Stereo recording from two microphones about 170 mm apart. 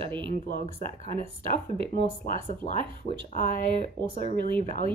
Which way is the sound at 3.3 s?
55° left (ahead or behind).